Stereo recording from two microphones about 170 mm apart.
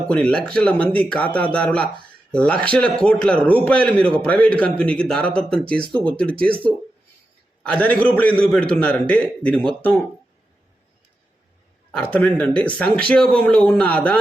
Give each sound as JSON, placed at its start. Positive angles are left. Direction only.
{"t": 0.1, "sound": "a man's voice", "side_deg": 5}
{"t": 11.9, "sound": "a man's voice", "side_deg": 5}